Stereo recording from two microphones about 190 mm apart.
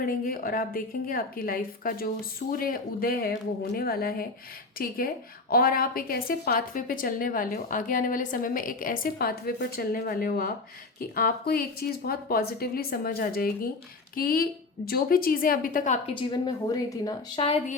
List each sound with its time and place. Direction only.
0.0 s a woman's voice: 50° left (ahead or behind)
16.1 s a woman's voice: 20° left (ahead or behind)